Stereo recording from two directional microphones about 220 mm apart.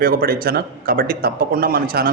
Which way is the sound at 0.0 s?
40° right (ahead or behind).